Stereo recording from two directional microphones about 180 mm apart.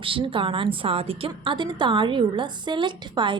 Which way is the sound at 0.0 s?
30° right (ahead or behind).